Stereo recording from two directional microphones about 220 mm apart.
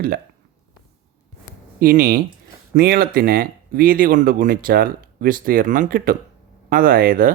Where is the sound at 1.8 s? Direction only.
40° right (ahead or behind).